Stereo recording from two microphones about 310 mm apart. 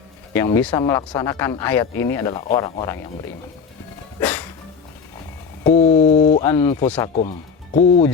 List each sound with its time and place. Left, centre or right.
0.3 s speech: centre
4.2 s music: centre
5.6 s speech: left
6.4 s speech: centre